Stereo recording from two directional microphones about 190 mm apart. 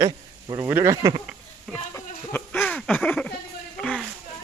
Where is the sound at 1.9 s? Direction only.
10° left (ahead or behind).